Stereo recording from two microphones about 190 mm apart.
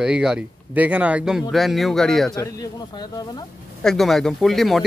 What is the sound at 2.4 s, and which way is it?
Speech, 20° left (ahead or behind).